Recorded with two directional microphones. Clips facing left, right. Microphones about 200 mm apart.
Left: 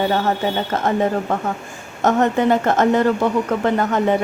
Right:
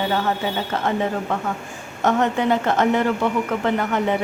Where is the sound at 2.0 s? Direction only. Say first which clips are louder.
Left 3 dB; 45° left (ahead or behind).